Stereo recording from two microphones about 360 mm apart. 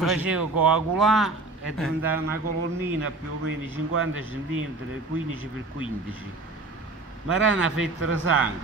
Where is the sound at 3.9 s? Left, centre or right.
Right.